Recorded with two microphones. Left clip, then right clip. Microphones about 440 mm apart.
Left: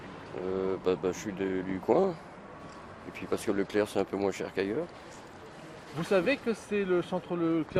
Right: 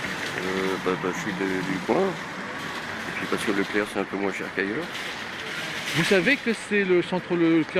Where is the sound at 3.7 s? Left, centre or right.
Left.